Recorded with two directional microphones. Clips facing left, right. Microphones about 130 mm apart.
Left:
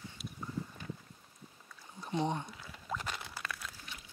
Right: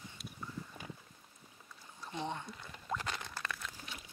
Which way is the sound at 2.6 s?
5° left (ahead or behind).